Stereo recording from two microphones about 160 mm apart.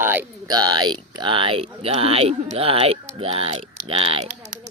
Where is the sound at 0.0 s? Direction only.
10° right (ahead or behind).